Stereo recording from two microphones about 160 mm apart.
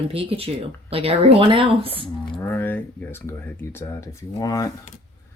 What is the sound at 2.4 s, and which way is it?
Speech, 15° left (ahead or behind).